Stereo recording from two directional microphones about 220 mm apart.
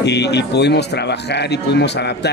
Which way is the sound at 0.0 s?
50° left (ahead or behind).